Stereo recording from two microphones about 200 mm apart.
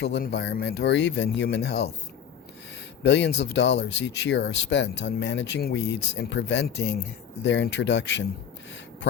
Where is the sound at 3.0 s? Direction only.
60° left (ahead or behind).